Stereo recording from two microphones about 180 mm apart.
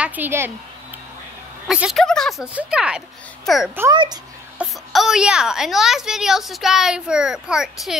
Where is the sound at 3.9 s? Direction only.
25° right (ahead or behind).